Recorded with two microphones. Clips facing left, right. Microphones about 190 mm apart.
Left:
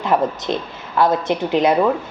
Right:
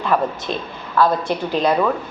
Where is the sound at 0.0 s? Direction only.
20° left (ahead or behind).